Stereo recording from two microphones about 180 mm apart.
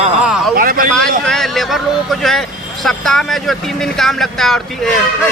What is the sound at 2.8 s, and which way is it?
Speech, centre (ahead or behind).